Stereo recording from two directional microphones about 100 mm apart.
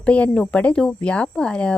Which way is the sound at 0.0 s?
10° left (ahead or behind).